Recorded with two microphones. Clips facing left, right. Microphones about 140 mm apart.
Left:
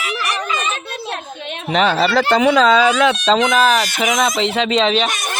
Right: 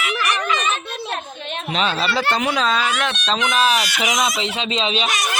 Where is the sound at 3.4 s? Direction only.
45° left (ahead or behind).